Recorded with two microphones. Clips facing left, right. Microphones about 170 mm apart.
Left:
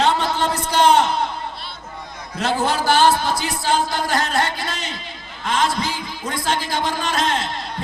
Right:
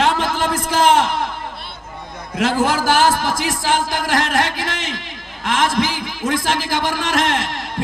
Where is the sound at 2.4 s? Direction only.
90° right.